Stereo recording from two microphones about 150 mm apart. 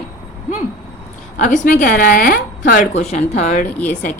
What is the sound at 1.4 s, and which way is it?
A woman's voice, 60° left (ahead or behind).